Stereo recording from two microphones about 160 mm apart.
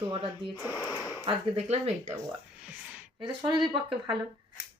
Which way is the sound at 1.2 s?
35° right (ahead or behind).